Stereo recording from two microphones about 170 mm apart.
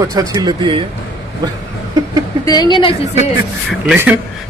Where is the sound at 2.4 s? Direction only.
25° left (ahead or behind).